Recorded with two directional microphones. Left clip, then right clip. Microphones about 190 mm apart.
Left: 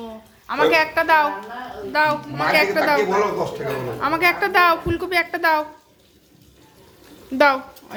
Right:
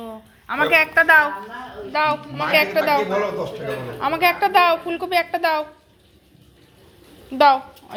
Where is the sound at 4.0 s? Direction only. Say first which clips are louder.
Right 1 dB; 15° left (ahead or behind).